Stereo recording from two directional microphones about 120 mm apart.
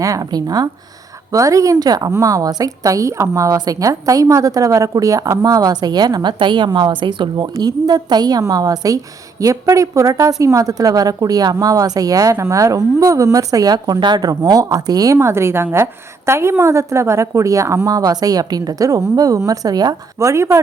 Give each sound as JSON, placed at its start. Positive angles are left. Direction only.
{"t": 0.0, "sound": "a woman's voice", "side_deg": -30}